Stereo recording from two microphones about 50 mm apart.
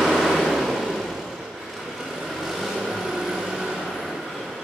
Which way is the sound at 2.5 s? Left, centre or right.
Centre.